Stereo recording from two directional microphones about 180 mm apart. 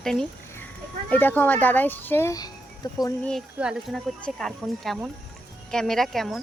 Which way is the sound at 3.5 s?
Centre (ahead or behind).